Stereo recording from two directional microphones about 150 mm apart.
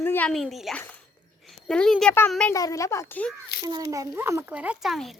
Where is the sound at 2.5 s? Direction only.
20° left (ahead or behind).